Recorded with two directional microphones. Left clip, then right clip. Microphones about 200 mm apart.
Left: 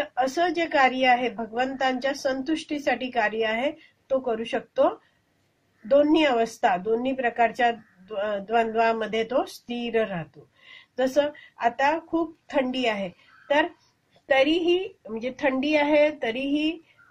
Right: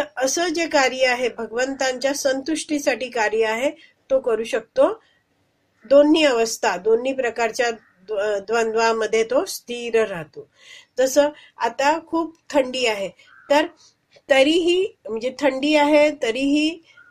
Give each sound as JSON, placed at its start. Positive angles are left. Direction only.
{"t": 0.0, "sound": "a woman's voice", "side_deg": -40}